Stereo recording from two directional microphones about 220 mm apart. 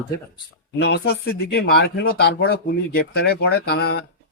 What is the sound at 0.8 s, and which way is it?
Speech, 50° left (ahead or behind).